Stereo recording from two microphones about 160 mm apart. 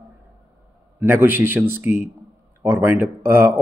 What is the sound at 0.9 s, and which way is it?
A man's voice, 15° right (ahead or behind).